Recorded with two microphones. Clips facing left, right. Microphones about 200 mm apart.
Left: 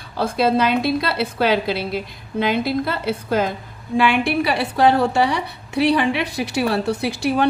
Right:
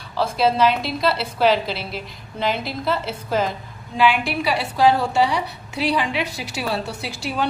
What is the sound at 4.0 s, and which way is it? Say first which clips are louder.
A woman's voice: left 1 dB; 55° left (ahead or behind).